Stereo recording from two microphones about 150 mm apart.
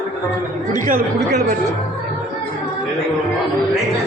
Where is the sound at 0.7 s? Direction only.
60° right (ahead or behind).